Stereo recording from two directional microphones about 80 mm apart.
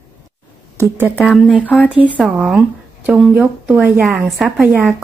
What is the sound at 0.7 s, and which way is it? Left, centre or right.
Speech, right.